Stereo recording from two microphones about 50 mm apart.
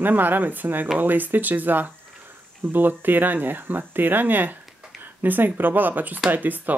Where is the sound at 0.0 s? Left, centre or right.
Right.